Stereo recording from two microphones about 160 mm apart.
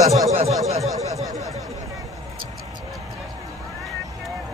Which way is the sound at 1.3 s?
20° right (ahead or behind).